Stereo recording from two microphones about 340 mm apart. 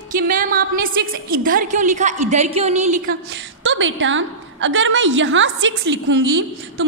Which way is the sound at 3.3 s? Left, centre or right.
Right.